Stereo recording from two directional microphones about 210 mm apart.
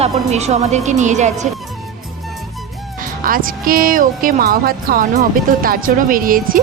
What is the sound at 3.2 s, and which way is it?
Speech, 40° right (ahead or behind).